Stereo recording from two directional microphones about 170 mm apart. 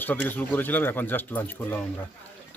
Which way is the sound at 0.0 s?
10° left (ahead or behind).